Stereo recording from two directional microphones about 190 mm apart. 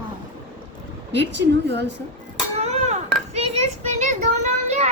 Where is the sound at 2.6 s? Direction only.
35° right (ahead or behind).